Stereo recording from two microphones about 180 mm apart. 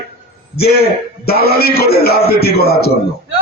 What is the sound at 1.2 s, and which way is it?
Speech, 60° left (ahead or behind).